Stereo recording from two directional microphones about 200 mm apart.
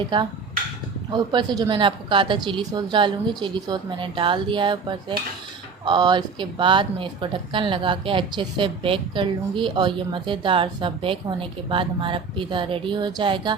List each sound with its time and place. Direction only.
0.1 s speech: 20° right (ahead or behind)